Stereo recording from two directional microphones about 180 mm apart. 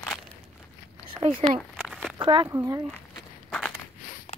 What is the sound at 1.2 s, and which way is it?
Speech, 35° right (ahead or behind).